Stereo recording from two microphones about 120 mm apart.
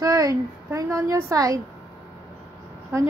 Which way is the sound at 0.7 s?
25° right (ahead or behind).